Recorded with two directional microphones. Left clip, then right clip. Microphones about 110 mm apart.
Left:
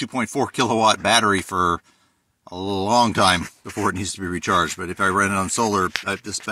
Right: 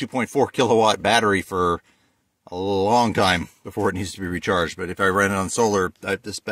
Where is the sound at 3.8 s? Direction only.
35° right (ahead or behind).